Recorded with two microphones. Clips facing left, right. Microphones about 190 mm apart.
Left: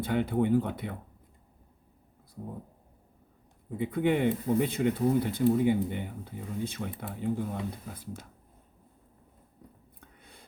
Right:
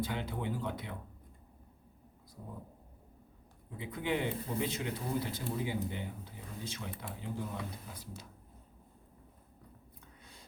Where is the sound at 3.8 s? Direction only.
55° left (ahead or behind).